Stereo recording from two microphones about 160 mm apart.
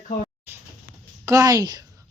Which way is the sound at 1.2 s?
20° right (ahead or behind).